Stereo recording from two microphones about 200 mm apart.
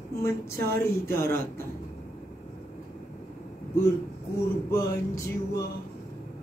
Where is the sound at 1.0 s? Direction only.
10° left (ahead or behind).